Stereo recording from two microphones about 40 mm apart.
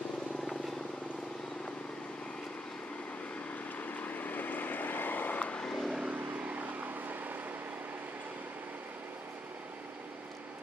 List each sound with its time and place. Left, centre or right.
3.8 s vehicle: left
5.6 s vehicle: centre
6.0 s vehicle: right